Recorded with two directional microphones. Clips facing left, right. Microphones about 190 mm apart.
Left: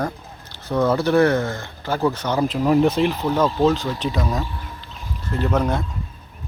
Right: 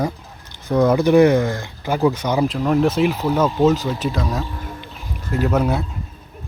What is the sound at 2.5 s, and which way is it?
Speech, 5° left (ahead or behind).